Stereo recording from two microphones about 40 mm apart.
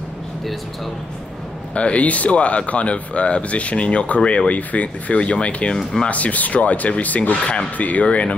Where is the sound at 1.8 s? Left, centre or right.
Left.